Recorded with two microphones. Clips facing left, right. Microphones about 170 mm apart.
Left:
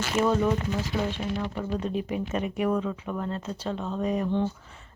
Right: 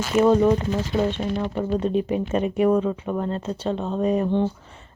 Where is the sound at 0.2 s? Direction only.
35° right (ahead or behind).